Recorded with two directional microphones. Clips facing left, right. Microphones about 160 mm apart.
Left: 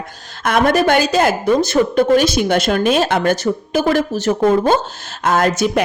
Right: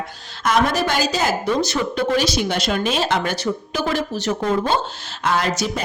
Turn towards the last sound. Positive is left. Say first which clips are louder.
# left 7 dB
turn(degrees=55)  # may be behind; listen again after turning